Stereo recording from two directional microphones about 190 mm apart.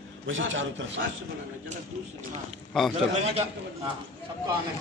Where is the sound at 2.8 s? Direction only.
Centre (ahead or behind).